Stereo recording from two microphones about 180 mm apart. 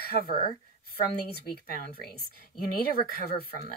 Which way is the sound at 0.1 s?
55° left (ahead or behind).